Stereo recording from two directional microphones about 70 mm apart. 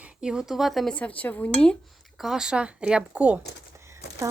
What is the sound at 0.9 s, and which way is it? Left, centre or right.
Dishes, centre.